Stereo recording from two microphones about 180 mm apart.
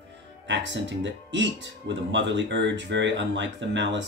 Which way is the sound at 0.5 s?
85° right.